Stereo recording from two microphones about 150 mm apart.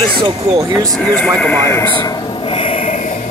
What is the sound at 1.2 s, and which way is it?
Speech, 10° left (ahead or behind).